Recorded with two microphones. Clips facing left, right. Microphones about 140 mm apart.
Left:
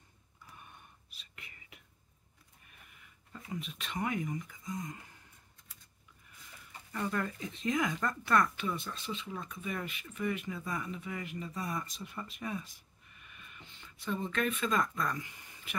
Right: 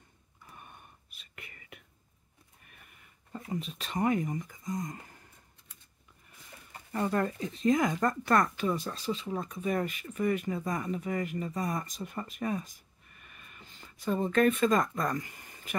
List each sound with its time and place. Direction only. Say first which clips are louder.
0.6 s whispering: right 5 dB; 50° right (ahead or behind)
3.3 s speech: right 5 dB; 30° right (ahead or behind)
6.9 s speech: right 6 dB; 35° right (ahead or behind)